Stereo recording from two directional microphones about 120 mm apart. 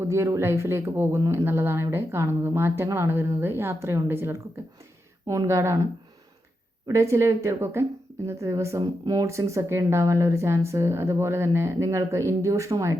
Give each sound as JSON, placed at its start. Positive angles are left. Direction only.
{"t": 0.0, "sound": "speech", "side_deg": -20}